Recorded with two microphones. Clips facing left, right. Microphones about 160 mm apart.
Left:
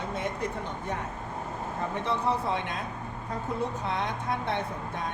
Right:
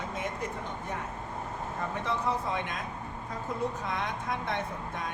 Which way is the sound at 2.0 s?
30° left (ahead or behind).